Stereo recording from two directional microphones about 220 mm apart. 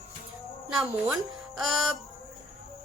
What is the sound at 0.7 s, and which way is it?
A woman's voice, 5° right (ahead or behind).